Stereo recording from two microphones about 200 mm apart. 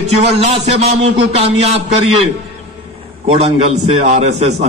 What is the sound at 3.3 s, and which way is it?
A man's voice, 30° right (ahead or behind).